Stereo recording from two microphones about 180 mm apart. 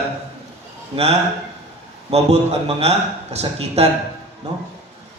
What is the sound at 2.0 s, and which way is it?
A man's voice, 35° right (ahead or behind).